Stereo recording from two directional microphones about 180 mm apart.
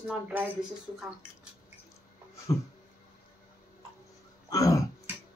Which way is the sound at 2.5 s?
15° left (ahead or behind).